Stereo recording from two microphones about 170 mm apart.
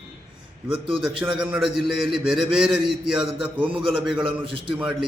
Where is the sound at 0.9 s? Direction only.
30° right (ahead or behind).